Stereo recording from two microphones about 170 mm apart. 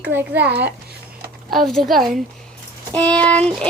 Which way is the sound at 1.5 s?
Centre (ahead or behind).